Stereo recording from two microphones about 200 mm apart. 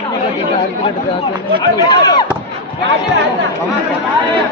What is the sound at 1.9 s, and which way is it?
Speech, 20° left (ahead or behind).